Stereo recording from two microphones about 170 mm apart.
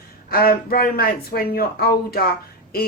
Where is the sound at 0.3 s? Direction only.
60° left (ahead or behind).